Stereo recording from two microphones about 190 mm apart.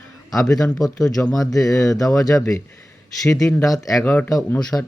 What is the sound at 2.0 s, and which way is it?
Speech, centre (ahead or behind).